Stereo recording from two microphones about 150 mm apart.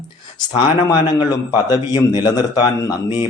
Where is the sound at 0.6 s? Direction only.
30° left (ahead or behind).